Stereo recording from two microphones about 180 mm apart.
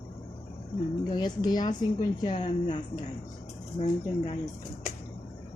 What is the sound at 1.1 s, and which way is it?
A woman's voice, 25° left (ahead or behind).